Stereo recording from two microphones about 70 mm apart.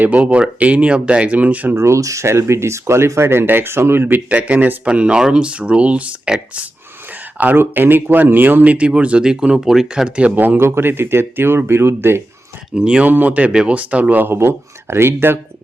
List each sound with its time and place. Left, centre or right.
0.0 s speech: right
1.7 s speech: right; by 6.7 s centre
7.1 s speech: right
10.3 s speech: right
12.7 s speech: centre
13.1 s speech: right
14.3 s speech: right